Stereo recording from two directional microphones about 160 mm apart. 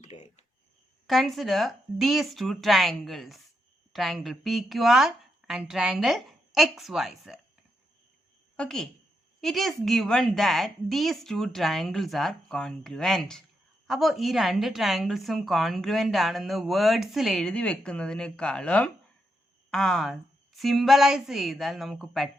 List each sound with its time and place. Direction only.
0.0 s a sound: 45° left (ahead or behind)
1.0 s a woman's voice: centre (ahead or behind)
8.5 s a woman's voice: 5° left (ahead or behind)